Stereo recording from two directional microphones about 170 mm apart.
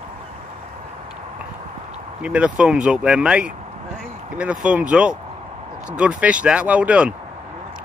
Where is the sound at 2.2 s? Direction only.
5° right (ahead or behind).